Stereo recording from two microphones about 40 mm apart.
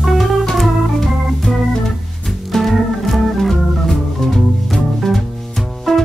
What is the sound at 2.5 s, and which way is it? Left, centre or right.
Organ, centre.